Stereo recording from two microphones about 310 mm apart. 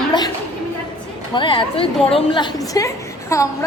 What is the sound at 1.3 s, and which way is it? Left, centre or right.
A woman's voice, centre.